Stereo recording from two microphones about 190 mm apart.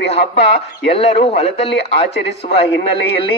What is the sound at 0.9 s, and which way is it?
Speech, 30° left (ahead or behind).